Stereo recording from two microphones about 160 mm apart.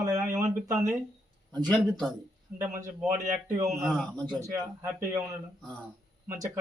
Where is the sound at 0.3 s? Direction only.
20° right (ahead or behind).